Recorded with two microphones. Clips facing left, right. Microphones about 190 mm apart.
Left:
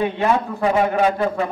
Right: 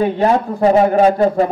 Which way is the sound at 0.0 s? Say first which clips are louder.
Right 5 dB; 40° right (ahead or behind).